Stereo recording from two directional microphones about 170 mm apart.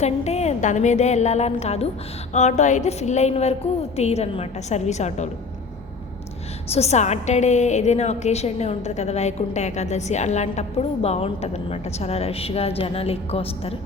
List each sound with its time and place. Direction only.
0.0 s a woman's voice: 40° left (ahead or behind)
6.7 s a woman's voice: 40° left (ahead or behind)